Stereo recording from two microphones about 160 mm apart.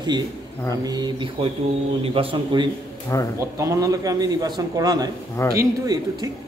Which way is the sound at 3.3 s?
20° right (ahead or behind).